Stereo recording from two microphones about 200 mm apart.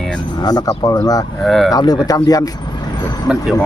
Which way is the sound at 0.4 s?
20° left (ahead or behind).